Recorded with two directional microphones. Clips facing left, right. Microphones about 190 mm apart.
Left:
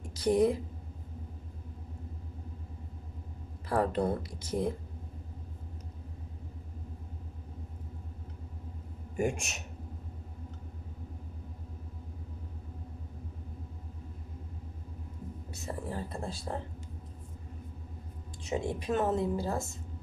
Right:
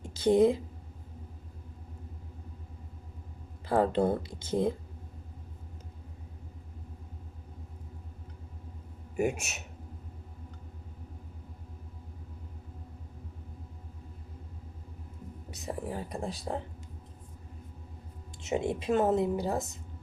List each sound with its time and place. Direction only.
0.1 s a woman's voice: 25° right (ahead or behind)
3.7 s a woman's voice: 25° right (ahead or behind)
9.1 s a man's voice: 5° right (ahead or behind)
15.4 s speech: 20° right (ahead or behind)
18.4 s a woman's voice: 25° right (ahead or behind)